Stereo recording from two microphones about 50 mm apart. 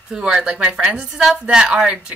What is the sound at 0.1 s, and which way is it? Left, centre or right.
A woman's voice, centre.